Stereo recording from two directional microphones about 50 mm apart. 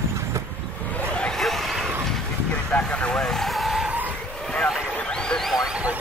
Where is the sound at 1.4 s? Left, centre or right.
Centre.